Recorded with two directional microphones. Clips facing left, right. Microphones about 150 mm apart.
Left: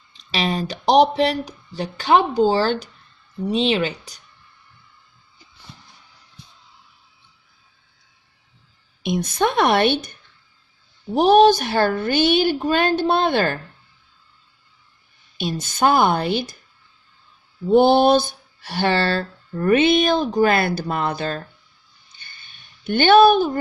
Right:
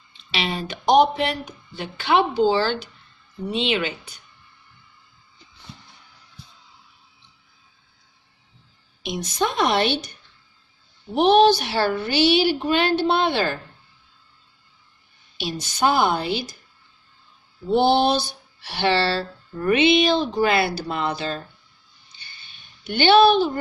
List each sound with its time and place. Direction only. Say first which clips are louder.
0.2 s speech: left 4 dB; 40° left (ahead or behind)
9.0 s a woman's voice: left 4 dB; 55° left (ahead or behind)
11.1 s a woman's voice: left 2 dB; 40° left (ahead or behind)
15.4 s a woman's voice: left 3 dB; 50° left (ahead or behind)
17.7 s a woman's voice: left 4 dB; 50° left (ahead or behind)
22.2 s a sound: left 1 dB; 50° left (ahead or behind)